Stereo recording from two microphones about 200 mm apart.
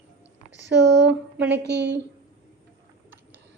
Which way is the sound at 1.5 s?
60° right (ahead or behind).